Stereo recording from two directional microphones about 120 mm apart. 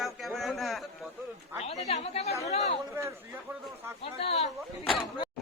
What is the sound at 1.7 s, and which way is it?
Speech, 60° left (ahead or behind).